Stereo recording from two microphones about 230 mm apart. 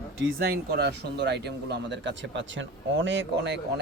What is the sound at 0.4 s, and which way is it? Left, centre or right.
Speech, right.